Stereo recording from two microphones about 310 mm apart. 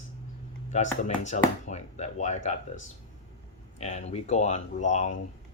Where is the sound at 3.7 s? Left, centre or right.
Left.